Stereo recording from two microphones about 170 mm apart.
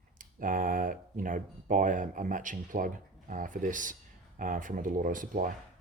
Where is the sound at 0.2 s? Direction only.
55° right (ahead or behind).